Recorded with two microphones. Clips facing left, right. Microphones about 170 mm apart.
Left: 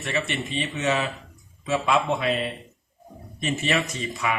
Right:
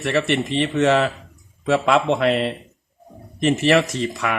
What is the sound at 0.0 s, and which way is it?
Speech, 70° right (ahead or behind).